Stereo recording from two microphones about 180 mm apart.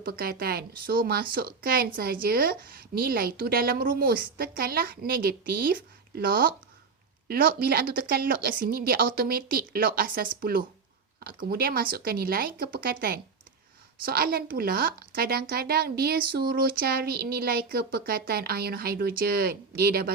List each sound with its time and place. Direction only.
0.0 s a woman's voice: 55° right (ahead or behind)